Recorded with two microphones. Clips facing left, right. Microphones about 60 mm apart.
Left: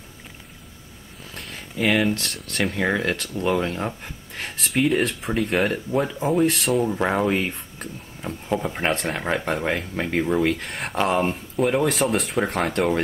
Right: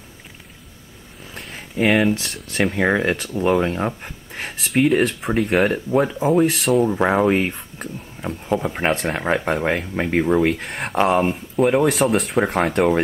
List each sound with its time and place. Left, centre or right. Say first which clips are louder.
1.3 s a sound: right 2 dB; centre
1.9 s speech: right 3 dB; centre
2.8 s speech: right 4 dB; centre
5.3 s speech: right 4 dB; centre
6.2 s speech: right 3 dB; centre
6.9 s speech: right 4 dB; centre
9.2 s speech: right 4 dB; centre
10.6 s speech: right 4 dB; centre